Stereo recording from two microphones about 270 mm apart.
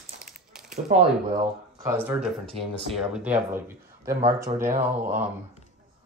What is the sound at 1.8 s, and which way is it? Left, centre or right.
Speech, centre.